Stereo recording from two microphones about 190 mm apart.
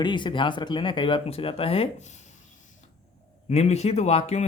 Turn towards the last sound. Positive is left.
turn(degrees=35)  # may be behind; listen again after turning